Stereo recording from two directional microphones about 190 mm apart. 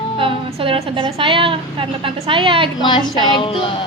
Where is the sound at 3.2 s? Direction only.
25° left (ahead or behind).